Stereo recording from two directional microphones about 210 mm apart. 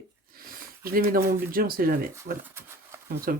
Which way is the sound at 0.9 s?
45° right (ahead or behind).